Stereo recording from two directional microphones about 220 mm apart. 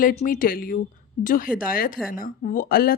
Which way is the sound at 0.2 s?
40° left (ahead or behind).